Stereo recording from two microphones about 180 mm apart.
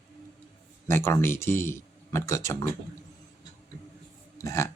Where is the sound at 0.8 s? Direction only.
15° left (ahead or behind).